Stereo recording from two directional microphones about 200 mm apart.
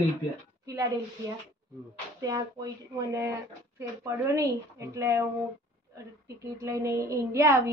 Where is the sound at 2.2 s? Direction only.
15° right (ahead or behind).